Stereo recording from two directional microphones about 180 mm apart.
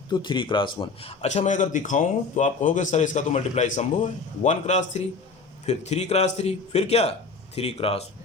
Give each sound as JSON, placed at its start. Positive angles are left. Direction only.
{"t": 0.1, "sound": "a man's voice", "side_deg": 25}